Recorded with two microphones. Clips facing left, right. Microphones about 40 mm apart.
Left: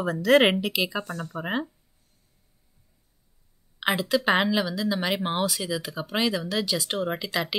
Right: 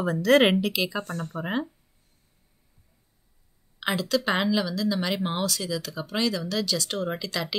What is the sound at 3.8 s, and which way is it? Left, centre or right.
A woman's voice, centre.